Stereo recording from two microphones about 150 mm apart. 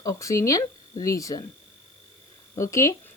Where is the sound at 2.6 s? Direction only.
20° left (ahead or behind).